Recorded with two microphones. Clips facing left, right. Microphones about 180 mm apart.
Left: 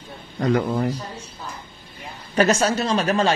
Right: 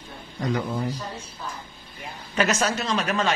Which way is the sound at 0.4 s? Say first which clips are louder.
Left 6 dB; 55° left (ahead or behind).